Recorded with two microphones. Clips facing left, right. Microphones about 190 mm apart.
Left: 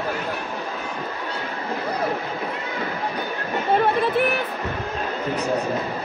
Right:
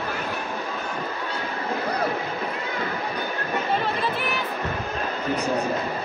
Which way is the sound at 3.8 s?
55° left (ahead or behind).